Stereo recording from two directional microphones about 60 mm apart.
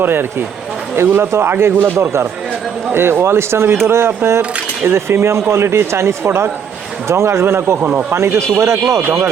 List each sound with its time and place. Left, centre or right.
0.0 s speech: right
8.1 s speech: right